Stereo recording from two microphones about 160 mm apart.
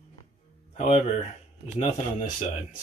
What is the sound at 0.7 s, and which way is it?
Speech, 45° left (ahead or behind).